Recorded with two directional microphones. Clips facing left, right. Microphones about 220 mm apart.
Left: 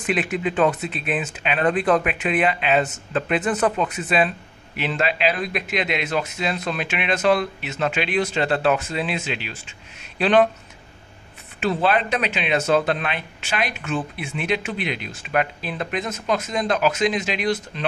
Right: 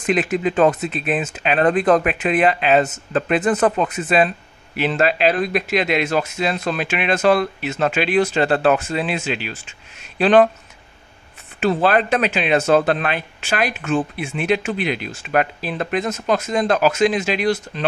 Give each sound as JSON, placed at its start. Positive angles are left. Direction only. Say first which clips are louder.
{"t": 0.0, "sound": "speech", "louder": "right 4 dB", "side_deg": -40}
{"t": 11.6, "sound": "speech", "louder": "right 4 dB", "side_deg": -50}